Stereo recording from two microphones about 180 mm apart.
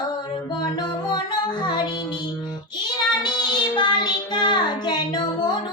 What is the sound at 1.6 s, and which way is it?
Music, 25° left (ahead or behind).